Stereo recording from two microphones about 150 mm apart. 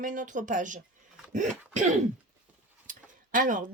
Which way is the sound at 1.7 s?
50° right (ahead or behind).